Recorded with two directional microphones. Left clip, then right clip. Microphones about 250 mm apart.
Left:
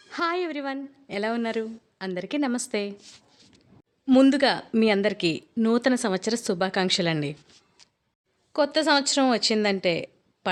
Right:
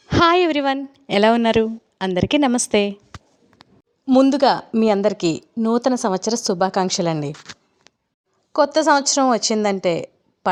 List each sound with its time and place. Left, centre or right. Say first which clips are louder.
0.1 s a woman's voice: right 12 dB; right
4.0 s a woman's voice: right 5 dB; centre
8.5 s a woman's voice: right 6 dB; centre